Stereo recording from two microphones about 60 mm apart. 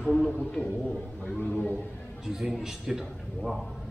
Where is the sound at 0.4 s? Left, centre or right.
Centre.